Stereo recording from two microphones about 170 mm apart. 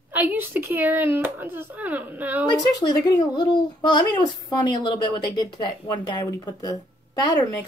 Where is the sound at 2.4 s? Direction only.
25° left (ahead or behind).